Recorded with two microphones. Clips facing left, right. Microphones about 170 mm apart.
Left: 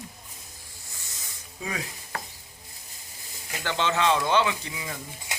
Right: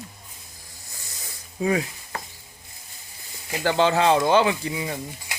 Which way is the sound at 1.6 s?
35° right (ahead or behind).